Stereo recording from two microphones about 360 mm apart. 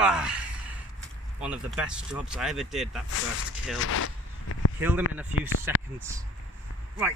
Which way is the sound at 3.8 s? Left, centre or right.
Left.